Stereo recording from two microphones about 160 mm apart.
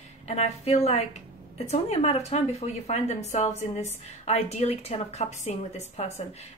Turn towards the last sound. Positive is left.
turn(degrees=40)  # may be behind; listen again after turning